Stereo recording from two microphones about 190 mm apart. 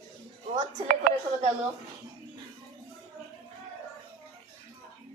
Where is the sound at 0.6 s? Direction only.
45° right (ahead or behind).